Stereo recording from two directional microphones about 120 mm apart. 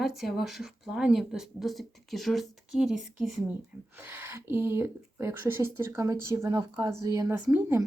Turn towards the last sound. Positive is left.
turn(degrees=-20)  # may be behind; listen again after turning